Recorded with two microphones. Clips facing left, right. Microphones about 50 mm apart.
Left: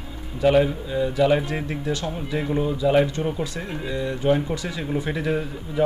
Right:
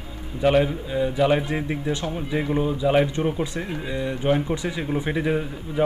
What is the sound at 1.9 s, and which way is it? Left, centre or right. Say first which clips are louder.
Speech: left 2 dB; right.